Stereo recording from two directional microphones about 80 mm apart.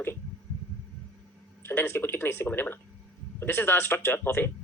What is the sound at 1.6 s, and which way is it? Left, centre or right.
Speech, left.